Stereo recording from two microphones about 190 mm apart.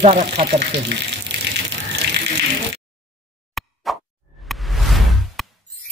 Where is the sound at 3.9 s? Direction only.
Centre (ahead or behind).